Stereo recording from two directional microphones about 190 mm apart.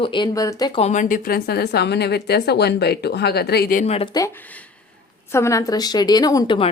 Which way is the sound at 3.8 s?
35° left (ahead or behind).